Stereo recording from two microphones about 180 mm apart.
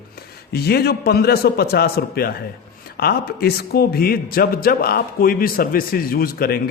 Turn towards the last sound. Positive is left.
turn(degrees=55)  # may be behind; listen again after turning